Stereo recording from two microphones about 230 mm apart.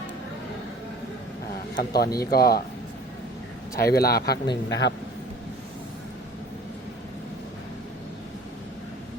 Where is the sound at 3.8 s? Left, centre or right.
Left.